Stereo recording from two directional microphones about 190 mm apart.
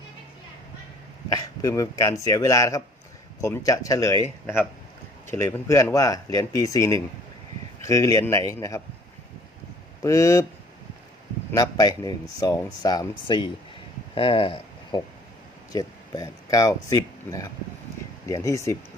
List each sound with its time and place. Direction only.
1.3 s speech: 20° left (ahead or behind)
10.0 s speech: 15° left (ahead or behind)
11.5 s speech: 20° left (ahead or behind)